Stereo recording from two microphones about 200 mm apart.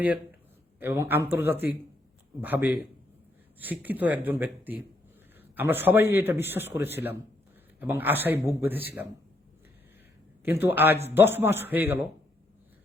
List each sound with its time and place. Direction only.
0.8 s a man's voice: 10° right (ahead or behind)
10.4 s a man's voice: 10° right (ahead or behind)